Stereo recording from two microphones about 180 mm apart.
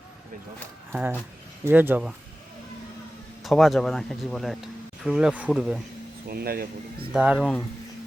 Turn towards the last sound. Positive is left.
turn(degrees=-5)  # may be behind; listen again after turning